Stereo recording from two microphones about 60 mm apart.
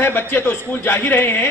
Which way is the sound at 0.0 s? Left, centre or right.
Left.